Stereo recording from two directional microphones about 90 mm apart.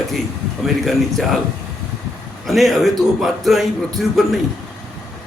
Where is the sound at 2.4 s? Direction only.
Centre (ahead or behind).